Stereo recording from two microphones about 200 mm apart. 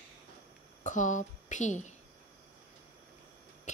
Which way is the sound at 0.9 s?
40° left (ahead or behind).